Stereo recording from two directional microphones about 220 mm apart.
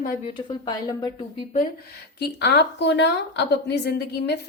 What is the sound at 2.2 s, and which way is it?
A woman's voice, 50° left (ahead or behind).